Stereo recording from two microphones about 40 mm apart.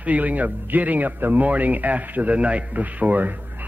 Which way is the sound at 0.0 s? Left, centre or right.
Right.